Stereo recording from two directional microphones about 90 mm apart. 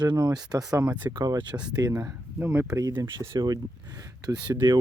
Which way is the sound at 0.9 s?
15° right (ahead or behind).